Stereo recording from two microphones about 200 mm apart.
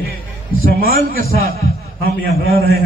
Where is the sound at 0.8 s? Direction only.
50° right (ahead or behind).